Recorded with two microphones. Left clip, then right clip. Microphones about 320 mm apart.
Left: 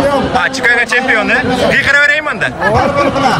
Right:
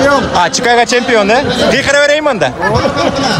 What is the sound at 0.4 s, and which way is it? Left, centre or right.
A man's voice, centre.